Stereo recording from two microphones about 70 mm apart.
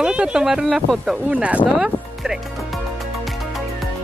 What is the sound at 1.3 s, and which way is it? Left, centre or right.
Speech, centre.